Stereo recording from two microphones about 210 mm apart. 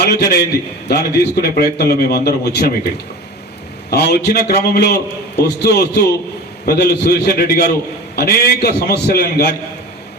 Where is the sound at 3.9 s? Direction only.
50° left (ahead or behind).